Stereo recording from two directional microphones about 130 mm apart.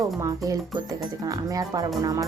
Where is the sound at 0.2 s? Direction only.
25° right (ahead or behind).